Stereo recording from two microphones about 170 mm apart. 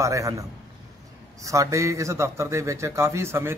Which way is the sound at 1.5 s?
20° right (ahead or behind).